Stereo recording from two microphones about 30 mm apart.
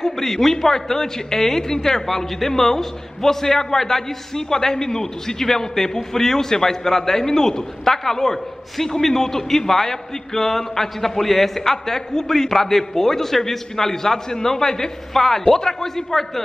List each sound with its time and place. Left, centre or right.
0.0 s a man's voice: centre